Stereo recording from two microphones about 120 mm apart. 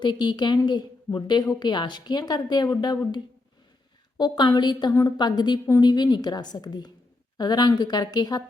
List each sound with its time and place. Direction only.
0.0 s a woman's voice: 40° left (ahead or behind)
4.2 s a woman's voice: 35° left (ahead or behind)